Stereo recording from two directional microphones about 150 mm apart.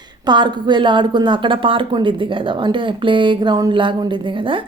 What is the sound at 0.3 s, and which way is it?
A woman's voice, 30° right (ahead or behind).